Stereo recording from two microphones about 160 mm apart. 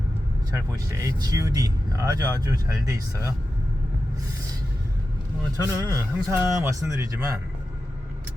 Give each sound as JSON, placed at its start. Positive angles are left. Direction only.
{"t": 0.9, "sound": "speech", "side_deg": -20}
{"t": 5.6, "sound": "speech", "side_deg": -20}